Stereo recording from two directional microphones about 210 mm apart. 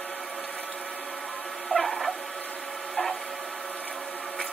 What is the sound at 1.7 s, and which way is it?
Dog, centre (ahead or behind).